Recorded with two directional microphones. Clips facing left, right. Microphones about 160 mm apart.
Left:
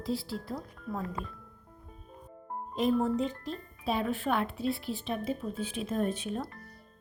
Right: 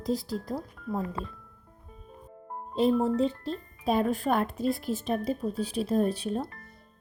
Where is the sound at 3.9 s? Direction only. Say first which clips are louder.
Right 4 dB; 40° right (ahead or behind).